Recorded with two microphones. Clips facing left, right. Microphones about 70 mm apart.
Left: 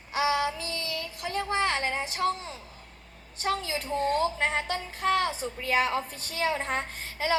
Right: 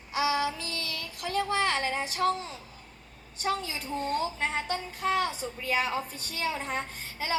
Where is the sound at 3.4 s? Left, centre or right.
Left.